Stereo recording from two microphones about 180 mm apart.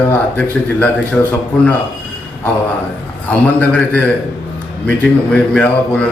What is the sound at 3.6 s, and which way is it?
A man's voice, 5° left (ahead or behind).